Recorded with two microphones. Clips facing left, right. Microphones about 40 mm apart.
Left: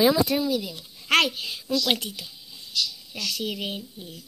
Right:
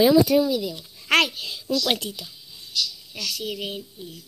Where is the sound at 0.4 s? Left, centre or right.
Centre.